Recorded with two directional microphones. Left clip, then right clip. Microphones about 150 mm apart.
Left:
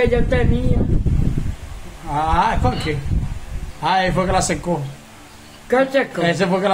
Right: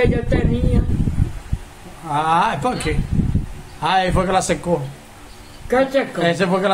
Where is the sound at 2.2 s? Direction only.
30° right (ahead or behind).